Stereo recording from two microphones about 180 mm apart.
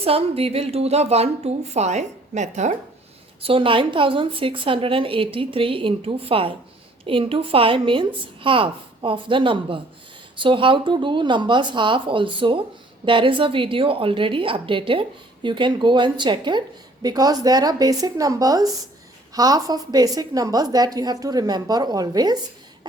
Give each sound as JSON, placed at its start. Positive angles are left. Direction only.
{"t": 0.0, "sound": "a woman's voice", "side_deg": -35}
{"t": 3.4, "sound": "a woman's voice", "side_deg": -30}